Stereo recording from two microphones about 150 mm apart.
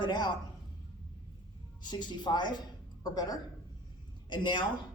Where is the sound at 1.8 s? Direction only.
30° left (ahead or behind).